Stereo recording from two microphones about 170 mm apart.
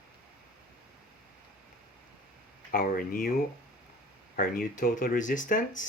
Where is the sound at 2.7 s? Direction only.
55° left (ahead or behind).